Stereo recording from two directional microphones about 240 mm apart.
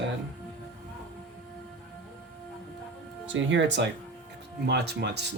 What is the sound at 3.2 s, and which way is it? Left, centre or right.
Speech, right.